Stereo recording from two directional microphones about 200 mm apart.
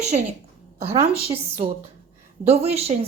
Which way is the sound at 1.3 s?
30° right (ahead or behind).